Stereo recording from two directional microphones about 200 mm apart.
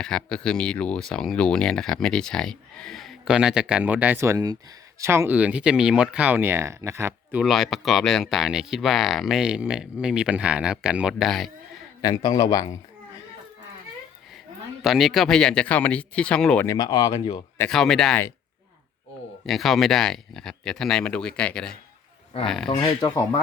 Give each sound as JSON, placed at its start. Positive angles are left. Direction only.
{"t": 0.0, "sound": "speech", "side_deg": 5}
{"t": 7.4, "sound": "speech", "side_deg": 0}
{"t": 12.0, "sound": "speech", "side_deg": 20}
{"t": 14.8, "sound": "speech", "side_deg": 0}
{"t": 16.6, "sound": "speech", "side_deg": 20}
{"t": 17.6, "sound": "speech", "side_deg": 5}
{"t": 19.5, "sound": "speech", "side_deg": 0}
{"t": 22.7, "sound": "speech", "side_deg": 20}